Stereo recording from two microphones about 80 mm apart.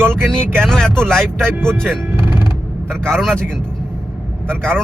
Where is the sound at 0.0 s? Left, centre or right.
Right.